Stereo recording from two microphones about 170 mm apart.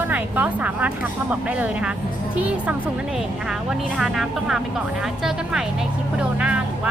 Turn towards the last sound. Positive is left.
turn(degrees=-5)  # may be behind; listen again after turning